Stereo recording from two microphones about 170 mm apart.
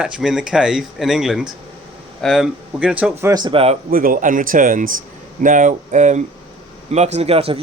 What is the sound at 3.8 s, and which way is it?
Speech, 60° right (ahead or behind).